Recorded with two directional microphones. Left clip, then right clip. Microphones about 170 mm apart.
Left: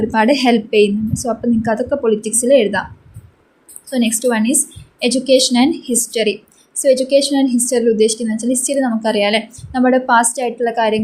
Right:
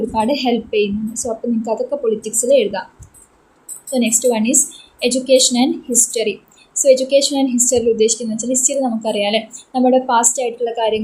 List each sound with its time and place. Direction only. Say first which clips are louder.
0.1 s a woman's voice: left 5 dB; 40° left (ahead or behind)
3.9 s a woman's voice: even; 35° left (ahead or behind)